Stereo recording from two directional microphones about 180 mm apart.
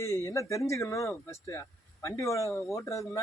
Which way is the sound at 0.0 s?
15° left (ahead or behind).